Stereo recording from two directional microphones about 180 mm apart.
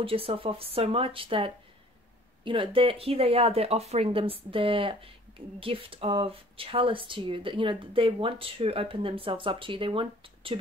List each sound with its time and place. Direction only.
0.0 s speech: 30° right (ahead or behind)